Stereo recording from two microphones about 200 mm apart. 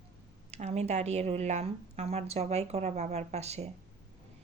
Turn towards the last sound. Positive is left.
turn(degrees=-35)  # may be behind; listen again after turning